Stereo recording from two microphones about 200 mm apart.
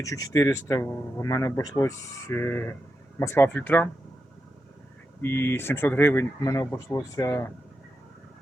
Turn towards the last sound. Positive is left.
turn(degrees=15)  # may be behind; listen again after turning